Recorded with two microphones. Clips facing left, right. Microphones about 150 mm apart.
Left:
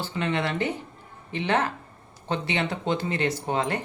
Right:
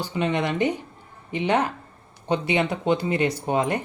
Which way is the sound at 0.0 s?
15° right (ahead or behind).